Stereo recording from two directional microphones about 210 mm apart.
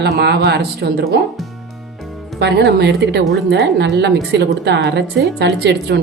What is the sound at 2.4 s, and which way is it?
A woman's voice, 50° right (ahead or behind).